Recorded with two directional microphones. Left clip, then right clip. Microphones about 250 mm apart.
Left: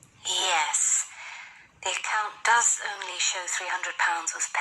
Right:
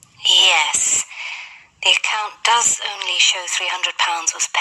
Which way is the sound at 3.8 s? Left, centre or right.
Right.